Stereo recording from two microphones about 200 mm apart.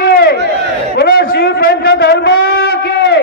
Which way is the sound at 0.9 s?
55° left (ahead or behind).